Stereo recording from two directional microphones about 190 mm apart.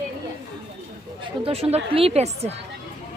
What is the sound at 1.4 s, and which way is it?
Speech, 30° right (ahead or behind).